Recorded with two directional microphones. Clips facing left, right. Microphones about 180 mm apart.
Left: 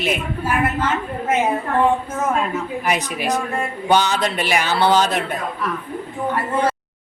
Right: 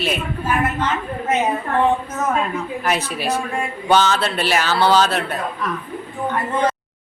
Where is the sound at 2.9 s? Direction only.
15° left (ahead or behind).